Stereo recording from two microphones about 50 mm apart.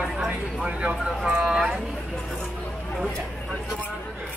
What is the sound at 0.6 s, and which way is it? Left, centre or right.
Speech, right.